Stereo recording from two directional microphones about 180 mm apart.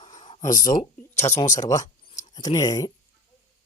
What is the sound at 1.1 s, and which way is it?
Speech, 15° left (ahead or behind).